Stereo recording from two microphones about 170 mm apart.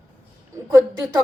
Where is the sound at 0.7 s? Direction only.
20° right (ahead or behind).